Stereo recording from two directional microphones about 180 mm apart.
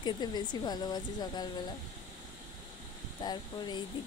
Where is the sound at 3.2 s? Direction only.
25° left (ahead or behind).